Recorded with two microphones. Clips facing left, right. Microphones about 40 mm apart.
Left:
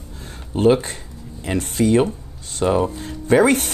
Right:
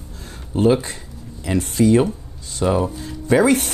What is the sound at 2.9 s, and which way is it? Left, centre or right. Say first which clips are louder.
Speech: left 1 dB; left.